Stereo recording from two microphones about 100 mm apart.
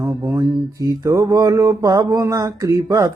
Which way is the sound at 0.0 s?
30° right (ahead or behind).